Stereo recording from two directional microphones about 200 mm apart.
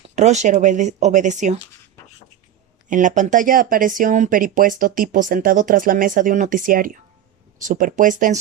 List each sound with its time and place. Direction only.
0.2 s speech: 35° right (ahead or behind)
2.9 s speech: 40° right (ahead or behind)